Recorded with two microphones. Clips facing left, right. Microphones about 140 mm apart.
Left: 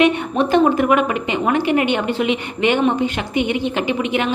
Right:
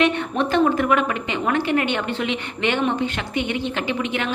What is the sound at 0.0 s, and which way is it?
A woman's voice, 15° left (ahead or behind).